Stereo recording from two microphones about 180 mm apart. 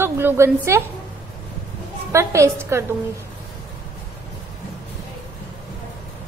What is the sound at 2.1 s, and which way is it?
Speech, 15° right (ahead or behind).